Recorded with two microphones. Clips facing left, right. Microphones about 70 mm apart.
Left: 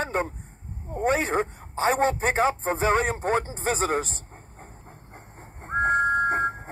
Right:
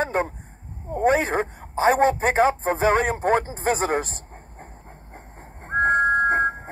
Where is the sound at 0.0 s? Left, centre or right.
Right.